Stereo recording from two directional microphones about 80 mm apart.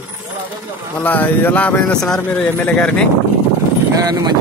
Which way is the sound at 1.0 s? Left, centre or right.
Left.